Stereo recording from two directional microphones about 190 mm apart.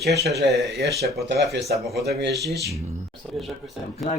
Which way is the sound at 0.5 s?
60° right (ahead or behind).